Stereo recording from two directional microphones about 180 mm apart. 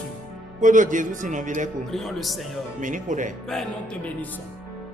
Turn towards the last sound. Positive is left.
turn(degrees=-45)  # may be behind; listen again after turning